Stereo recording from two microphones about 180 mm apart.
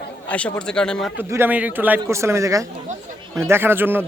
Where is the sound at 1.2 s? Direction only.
10° right (ahead or behind).